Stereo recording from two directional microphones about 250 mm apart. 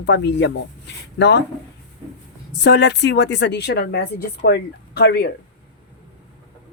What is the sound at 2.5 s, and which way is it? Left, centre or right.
Speech, left.